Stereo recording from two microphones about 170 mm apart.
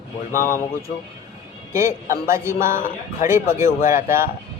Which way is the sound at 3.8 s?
50° left (ahead or behind).